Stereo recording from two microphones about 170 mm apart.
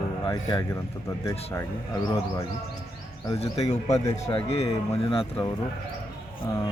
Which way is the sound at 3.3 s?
35° left (ahead or behind).